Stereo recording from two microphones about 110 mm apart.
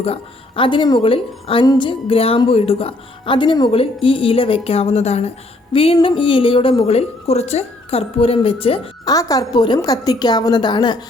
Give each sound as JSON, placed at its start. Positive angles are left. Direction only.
{"t": 0.0, "sound": "a woman's voice", "side_deg": 55}
{"t": 1.0, "sound": "a woman's voice", "side_deg": 55}
{"t": 5.7, "sound": "a woman's voice", "side_deg": 55}
{"t": 9.0, "sound": "a woman's voice", "side_deg": 35}